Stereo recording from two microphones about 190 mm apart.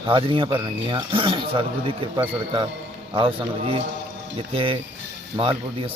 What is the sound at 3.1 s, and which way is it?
A man's voice, 30° right (ahead or behind).